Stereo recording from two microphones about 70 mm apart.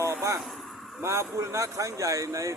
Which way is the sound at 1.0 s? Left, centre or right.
Right.